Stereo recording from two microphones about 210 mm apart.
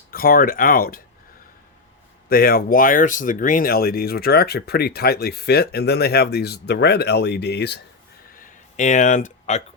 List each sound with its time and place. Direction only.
0.1 s speech: 45° left (ahead or behind)
2.3 s speech: 45° left (ahead or behind)
8.4 s a sound: 35° left (ahead or behind)